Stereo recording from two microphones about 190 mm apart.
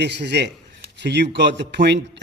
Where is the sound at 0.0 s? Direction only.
60° right (ahead or behind).